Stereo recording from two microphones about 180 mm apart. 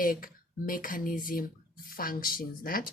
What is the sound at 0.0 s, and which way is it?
Speech, 50° left (ahead or behind).